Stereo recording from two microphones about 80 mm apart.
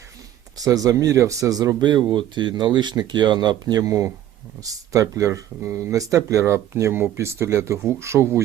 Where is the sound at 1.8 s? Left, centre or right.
Right.